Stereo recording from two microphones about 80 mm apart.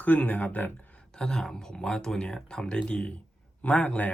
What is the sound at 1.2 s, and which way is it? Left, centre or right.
Speech, centre.